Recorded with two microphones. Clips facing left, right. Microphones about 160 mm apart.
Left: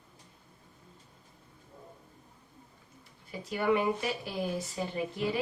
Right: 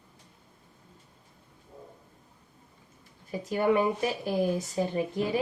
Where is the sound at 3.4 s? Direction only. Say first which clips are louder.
Right 3 dB; 45° right (ahead or behind).